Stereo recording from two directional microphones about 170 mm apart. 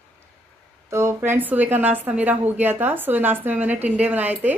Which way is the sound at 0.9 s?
15° right (ahead or behind).